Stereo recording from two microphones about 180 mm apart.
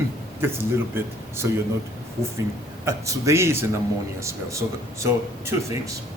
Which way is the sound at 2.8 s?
15° right (ahead or behind).